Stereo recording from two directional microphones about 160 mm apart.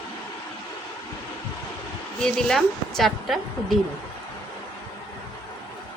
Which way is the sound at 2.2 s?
5° left (ahead or behind).